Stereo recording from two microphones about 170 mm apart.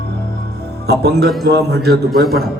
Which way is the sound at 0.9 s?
70° right (ahead or behind).